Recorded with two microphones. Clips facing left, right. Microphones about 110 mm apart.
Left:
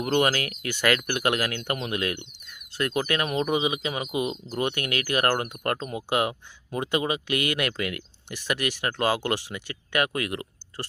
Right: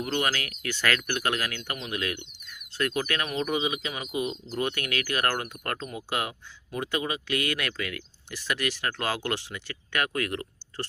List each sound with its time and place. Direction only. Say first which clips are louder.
0.0 s speech: left 5 dB; 30° left (ahead or behind)
0.7 s speech: left 3 dB; 15° left (ahead or behind)